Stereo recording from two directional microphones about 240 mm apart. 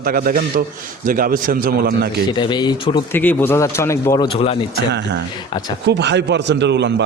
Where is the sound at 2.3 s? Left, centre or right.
Centre.